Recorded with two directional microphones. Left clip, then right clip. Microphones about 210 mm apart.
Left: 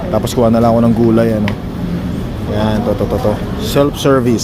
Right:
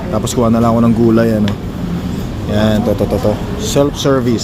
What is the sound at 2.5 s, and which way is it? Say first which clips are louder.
Speech: right 2 dB; 25° right (ahead or behind).